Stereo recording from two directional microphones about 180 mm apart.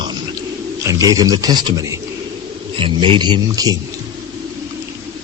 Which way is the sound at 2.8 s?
30° right (ahead or behind).